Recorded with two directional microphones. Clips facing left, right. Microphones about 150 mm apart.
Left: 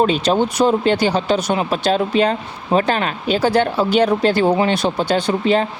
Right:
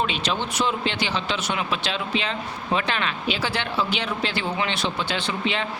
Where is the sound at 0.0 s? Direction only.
40° left (ahead or behind).